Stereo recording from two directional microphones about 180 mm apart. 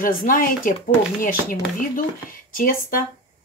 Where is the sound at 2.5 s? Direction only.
50° left (ahead or behind).